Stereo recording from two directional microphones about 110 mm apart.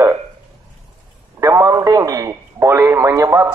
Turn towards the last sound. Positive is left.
turn(degrees=-25)  # may be behind; listen again after turning